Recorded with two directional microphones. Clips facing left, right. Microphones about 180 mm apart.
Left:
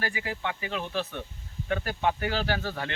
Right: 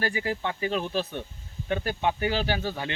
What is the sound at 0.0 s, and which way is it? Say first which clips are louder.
Speech: right 4 dB; 35° right (ahead or behind).